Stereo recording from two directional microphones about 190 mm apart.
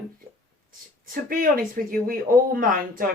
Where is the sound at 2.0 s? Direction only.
50° right (ahead or behind).